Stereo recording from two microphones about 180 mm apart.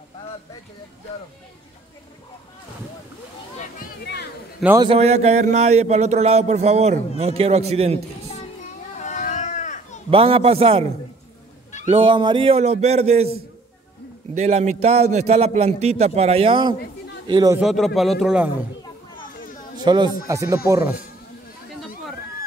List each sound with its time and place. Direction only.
4.0 s a sound: 65° left (ahead or behind)
4.7 s a man's voice: 30° right (ahead or behind)
9.0 s a sound: 40° left (ahead or behind)
10.1 s a man's voice: 30° right (ahead or behind)
14.3 s a man's voice: 40° right (ahead or behind); by 17.6 s 20° right (ahead or behind)
17.6 s a man's voice: centre (ahead or behind)
19.8 s speech: 25° right (ahead or behind)